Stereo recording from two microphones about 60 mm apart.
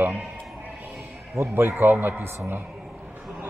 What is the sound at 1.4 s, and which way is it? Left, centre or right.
Speech, right.